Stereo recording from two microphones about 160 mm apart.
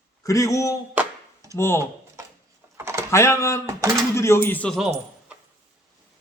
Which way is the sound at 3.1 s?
15° left (ahead or behind).